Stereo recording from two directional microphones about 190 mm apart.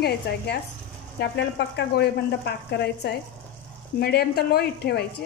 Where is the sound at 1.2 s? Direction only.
55° left (ahead or behind).